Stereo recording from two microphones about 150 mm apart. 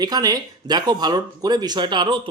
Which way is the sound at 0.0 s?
25° right (ahead or behind).